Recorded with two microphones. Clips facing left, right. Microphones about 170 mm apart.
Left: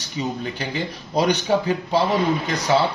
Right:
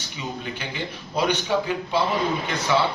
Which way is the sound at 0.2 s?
35° left (ahead or behind).